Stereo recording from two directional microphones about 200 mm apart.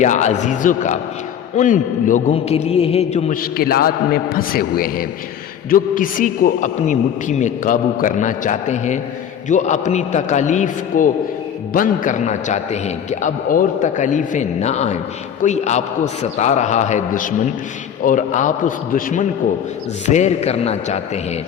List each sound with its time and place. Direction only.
0.0 s a man's voice: 35° left (ahead or behind)
3.6 s a man's voice: 50° left (ahead or behind); by 21.0 s 30° left (ahead or behind)